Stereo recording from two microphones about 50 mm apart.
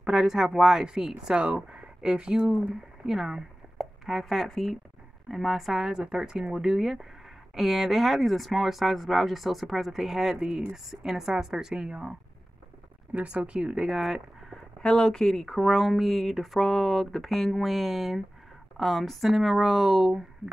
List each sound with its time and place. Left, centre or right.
0.0 s speech: centre
1.4 s speech: right
2.6 s speech: centre
5.9 s speech: centre
13.1 s speech: right; by 14.6 s centre
14.8 s speech: centre